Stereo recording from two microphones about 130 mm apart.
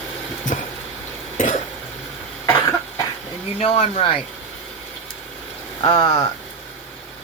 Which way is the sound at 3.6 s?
55° left (ahead or behind).